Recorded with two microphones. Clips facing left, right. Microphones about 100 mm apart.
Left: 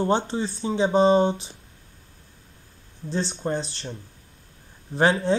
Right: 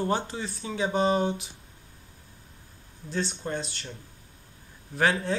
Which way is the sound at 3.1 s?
30° left (ahead or behind).